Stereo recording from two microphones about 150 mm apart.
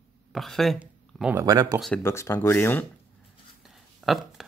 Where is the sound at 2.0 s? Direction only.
20° left (ahead or behind).